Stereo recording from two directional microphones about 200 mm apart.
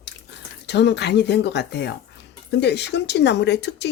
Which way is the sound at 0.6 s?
60° left (ahead or behind).